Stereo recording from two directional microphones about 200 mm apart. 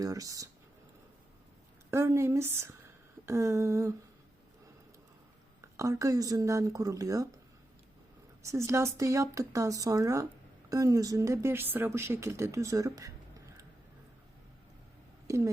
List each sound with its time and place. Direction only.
0.0 s speech: 15° right (ahead or behind)
1.9 s speech: 15° right (ahead or behind)
5.7 s speech: 15° right (ahead or behind)
8.4 s speech: 15° right (ahead or behind)
15.3 s speech: 15° right (ahead or behind)